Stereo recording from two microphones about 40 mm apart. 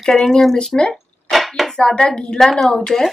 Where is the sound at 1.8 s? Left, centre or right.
Left.